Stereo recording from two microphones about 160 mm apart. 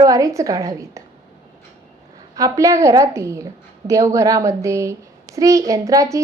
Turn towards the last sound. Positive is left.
turn(degrees=-20)  # may be behind; listen again after turning